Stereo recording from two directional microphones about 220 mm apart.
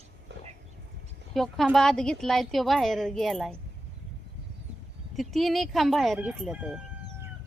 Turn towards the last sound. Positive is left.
turn(degrees=-5)  # may be behind; listen again after turning